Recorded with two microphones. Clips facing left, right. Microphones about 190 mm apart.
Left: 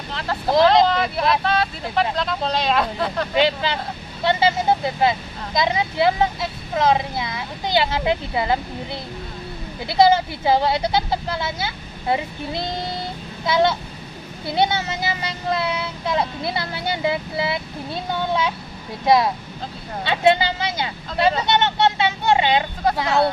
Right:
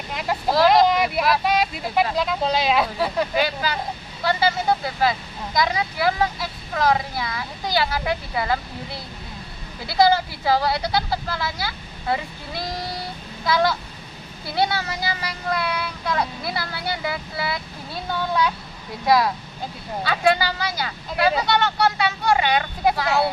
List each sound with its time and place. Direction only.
0.1 s speech: 15° right (ahead or behind)
3.3 s speech: 25° left (ahead or behind)
23.0 s speech: 5° right (ahead or behind)